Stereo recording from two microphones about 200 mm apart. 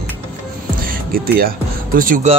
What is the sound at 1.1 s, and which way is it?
Speech, 45° right (ahead or behind).